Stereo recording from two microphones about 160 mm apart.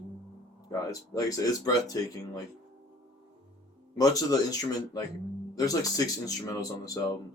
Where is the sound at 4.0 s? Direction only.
25° left (ahead or behind).